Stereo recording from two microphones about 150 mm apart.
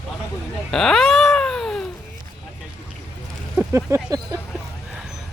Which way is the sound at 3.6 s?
20° right (ahead or behind).